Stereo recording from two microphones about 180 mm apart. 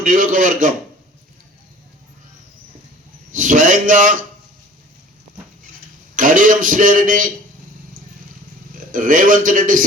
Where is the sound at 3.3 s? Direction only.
45° right (ahead or behind).